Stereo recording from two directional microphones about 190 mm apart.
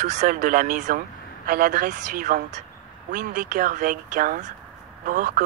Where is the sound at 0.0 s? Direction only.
40° right (ahead or behind).